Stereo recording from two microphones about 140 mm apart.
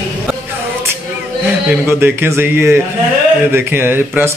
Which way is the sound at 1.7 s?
15° right (ahead or behind).